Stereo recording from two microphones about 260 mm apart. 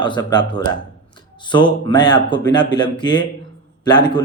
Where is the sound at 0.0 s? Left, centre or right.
Centre.